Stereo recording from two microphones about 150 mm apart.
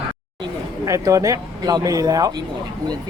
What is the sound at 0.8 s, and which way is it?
Speech, 20° right (ahead or behind).